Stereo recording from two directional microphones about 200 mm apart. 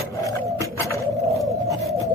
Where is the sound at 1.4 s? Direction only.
Centre (ahead or behind).